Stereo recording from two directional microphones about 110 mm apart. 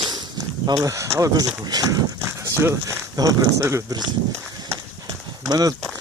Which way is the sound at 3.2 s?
35° right (ahead or behind).